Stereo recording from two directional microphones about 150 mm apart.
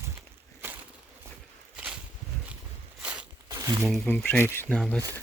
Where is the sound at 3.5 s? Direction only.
20° right (ahead or behind).